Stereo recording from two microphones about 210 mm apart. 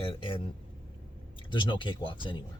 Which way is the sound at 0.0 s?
25° left (ahead or behind).